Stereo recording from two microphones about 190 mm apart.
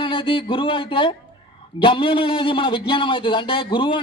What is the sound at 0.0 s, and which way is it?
A man's voice, 25° left (ahead or behind).